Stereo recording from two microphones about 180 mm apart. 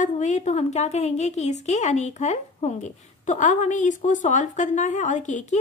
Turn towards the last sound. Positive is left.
turn(degrees=40)  # may be behind; listen again after turning